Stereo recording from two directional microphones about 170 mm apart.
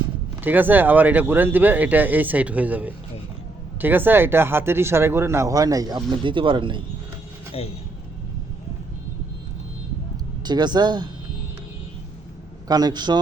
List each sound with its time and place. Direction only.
0.4 s speech: 10° right (ahead or behind); by 6.8 s 30° right (ahead or behind)
7.6 s speech: 35° left (ahead or behind)
10.4 s speech: 25° right (ahead or behind)
12.6 s speech: 25° right (ahead or behind)